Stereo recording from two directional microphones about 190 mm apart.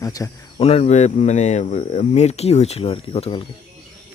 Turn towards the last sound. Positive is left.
turn(degrees=30)  # may be behind; listen again after turning